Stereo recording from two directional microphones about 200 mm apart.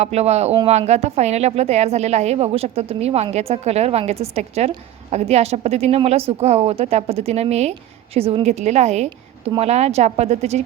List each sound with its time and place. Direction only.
0.0 s a woman's voice: 30° right (ahead or behind)